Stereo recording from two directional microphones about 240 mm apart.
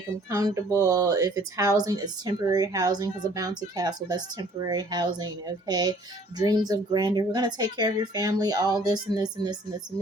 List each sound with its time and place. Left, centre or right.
0.3 s a woman's voice: centre